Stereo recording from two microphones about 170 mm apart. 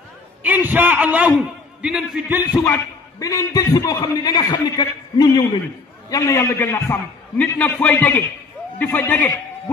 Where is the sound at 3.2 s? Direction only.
20° left (ahead or behind).